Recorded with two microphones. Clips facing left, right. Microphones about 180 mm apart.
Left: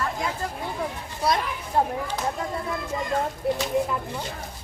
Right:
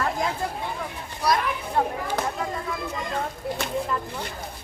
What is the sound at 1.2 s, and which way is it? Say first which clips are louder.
Children playing: right 1 dB; 25° left (ahead or behind).